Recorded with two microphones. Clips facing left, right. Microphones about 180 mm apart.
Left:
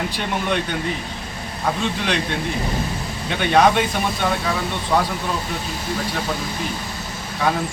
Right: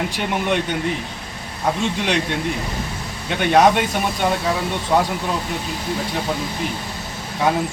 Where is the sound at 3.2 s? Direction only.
10° right (ahead or behind).